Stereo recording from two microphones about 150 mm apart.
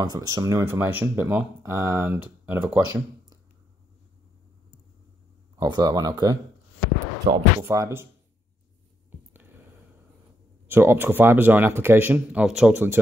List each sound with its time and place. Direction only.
0.0 s speech: 25° right (ahead or behind)
5.6 s speech: 30° right (ahead or behind)
7.6 s speech: 20° right (ahead or behind)
10.7 s speech: 15° right (ahead or behind)